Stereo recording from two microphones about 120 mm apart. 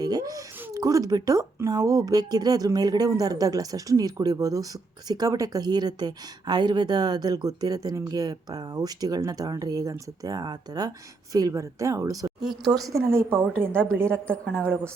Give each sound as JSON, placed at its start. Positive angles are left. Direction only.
{"t": 0.0, "sound": "a woman's voice", "side_deg": -30}
{"t": 14.1, "sound": "a woman's voice", "side_deg": 10}